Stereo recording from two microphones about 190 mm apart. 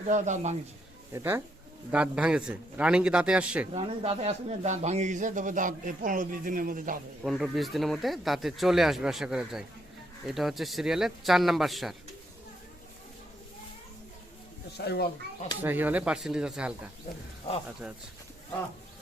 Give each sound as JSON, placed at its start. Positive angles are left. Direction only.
{"t": 0.1, "sound": "speech", "side_deg": -40}
{"t": 1.1, "sound": "speech", "side_deg": -10}
{"t": 3.8, "sound": "speech", "side_deg": -30}
{"t": 7.3, "sound": "speech", "side_deg": 0}
{"t": 14.8, "sound": "a child's voice", "side_deg": 55}
{"t": 15.6, "sound": "speech", "side_deg": -10}